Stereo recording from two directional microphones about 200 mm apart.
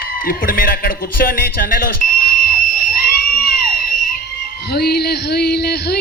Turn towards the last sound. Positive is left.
turn(degrees=55)  # may be behind; listen again after turning